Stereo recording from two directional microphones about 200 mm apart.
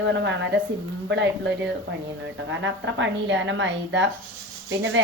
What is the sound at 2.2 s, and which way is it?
A woman's voice, 65° right (ahead or behind).